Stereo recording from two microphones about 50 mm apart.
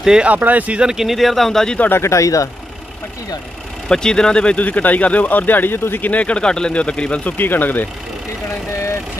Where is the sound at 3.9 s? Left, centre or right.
Centre.